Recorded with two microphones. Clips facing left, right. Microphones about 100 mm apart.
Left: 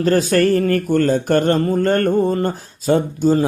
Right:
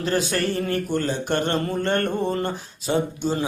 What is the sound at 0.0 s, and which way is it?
Speech, 45° left (ahead or behind).